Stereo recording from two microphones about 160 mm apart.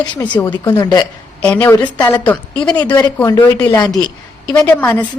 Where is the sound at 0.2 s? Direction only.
10° left (ahead or behind).